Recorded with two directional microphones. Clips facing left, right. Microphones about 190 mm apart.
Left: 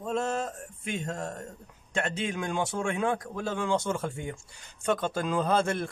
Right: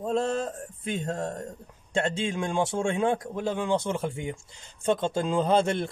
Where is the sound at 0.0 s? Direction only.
30° right (ahead or behind).